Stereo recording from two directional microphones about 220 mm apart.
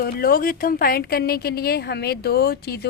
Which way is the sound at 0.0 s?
45° left (ahead or behind).